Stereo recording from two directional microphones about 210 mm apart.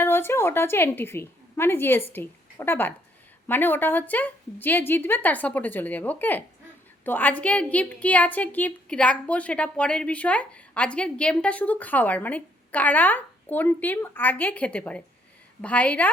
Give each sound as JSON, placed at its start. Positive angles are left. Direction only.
{"t": 0.0, "sound": "a woman's voice", "side_deg": 10}